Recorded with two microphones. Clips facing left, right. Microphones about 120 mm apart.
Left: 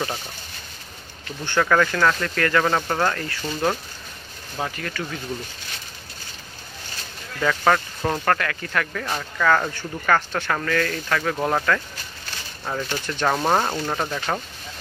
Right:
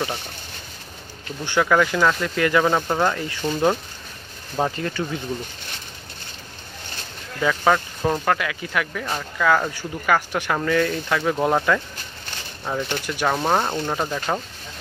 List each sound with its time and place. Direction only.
1.4 s speech: 15° right (ahead or behind)
7.3 s speech: 5° right (ahead or behind)
13.3 s speech: centre (ahead or behind)